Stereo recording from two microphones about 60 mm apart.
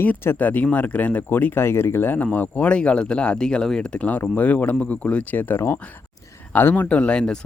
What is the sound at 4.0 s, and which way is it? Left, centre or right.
Speech, left.